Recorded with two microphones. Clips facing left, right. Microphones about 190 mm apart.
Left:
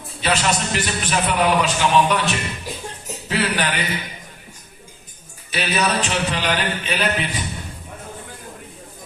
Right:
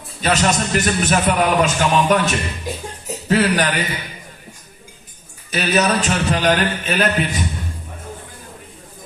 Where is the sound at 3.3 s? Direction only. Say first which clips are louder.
Right 5 dB; 45° right (ahead or behind).